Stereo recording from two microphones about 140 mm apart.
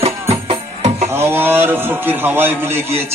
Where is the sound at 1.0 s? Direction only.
15° right (ahead or behind).